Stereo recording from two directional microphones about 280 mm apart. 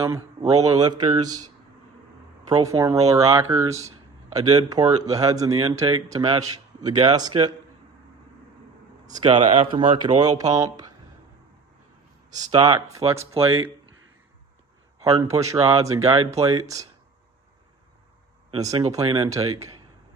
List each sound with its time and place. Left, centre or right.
0.0 s a man's voice: centre
2.5 s a man's voice: centre
9.0 s a man's voice: centre
12.4 s a man's voice: centre
15.6 s a man's voice: centre
18.5 s a man's voice: centre